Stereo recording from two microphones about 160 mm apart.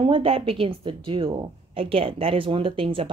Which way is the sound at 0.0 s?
35° right (ahead or behind).